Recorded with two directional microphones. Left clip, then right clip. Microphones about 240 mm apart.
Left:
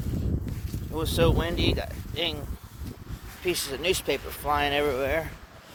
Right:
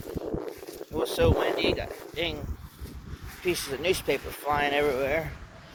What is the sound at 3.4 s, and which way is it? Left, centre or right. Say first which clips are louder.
Speech: even; centre.